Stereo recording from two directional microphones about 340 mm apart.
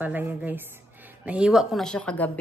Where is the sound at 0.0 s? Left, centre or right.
Centre.